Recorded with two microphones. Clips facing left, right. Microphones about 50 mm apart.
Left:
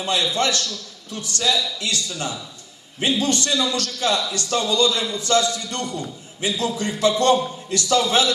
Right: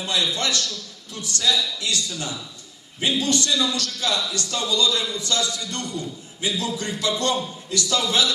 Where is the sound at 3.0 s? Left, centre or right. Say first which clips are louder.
Left 1 dB; left.